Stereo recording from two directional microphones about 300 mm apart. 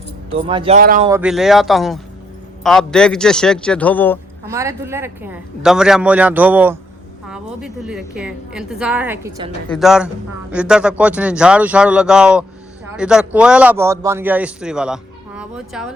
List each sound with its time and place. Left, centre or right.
0.4 s speech: centre
1.0 s a man's voice: centre
4.4 s a man's voice: centre